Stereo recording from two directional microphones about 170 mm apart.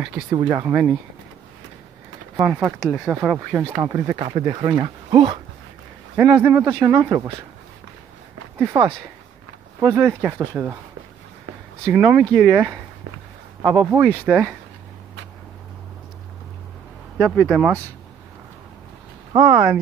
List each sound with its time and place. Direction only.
0.3 s speech: 20° right (ahead or behind)
2.3 s speech: 5° right (ahead or behind)
3.7 s speech: 20° right (ahead or behind)
8.7 s speech: 20° right (ahead or behind)
11.9 s speech: 10° right (ahead or behind)
17.4 s speech: centre (ahead or behind)
19.4 s speech: 10° right (ahead or behind)